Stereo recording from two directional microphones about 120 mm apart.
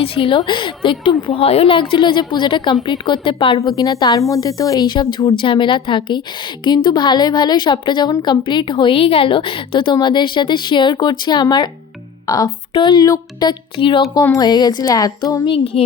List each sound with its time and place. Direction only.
0.0 s a woman's voice: 50° left (ahead or behind)
3.6 s a woman's voice: 30° left (ahead or behind)
14.3 s a woman's voice: 35° left (ahead or behind)
15.4 s a woman's voice: 50° left (ahead or behind)